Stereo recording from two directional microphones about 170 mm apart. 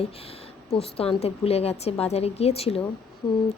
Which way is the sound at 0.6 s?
35° left (ahead or behind).